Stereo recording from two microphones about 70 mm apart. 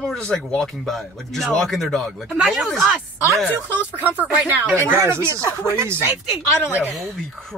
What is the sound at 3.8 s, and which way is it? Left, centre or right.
Speech, right.